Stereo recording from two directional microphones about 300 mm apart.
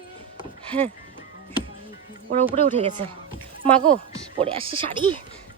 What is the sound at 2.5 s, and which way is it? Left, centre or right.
Speech, centre.